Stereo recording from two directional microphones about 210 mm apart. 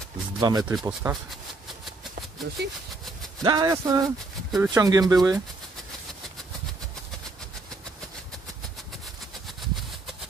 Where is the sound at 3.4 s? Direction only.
20° right (ahead or behind).